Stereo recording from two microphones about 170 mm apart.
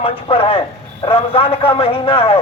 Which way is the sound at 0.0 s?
35° left (ahead or behind).